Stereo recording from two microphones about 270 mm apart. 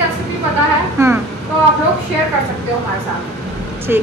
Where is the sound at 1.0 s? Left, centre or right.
Centre.